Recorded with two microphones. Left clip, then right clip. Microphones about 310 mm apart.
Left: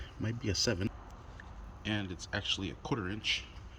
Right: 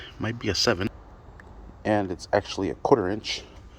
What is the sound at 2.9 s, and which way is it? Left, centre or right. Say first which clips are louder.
Speech: right 11 dB; centre.